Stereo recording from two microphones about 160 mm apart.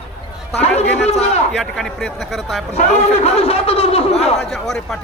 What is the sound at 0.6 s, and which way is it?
Speech, 40° left (ahead or behind).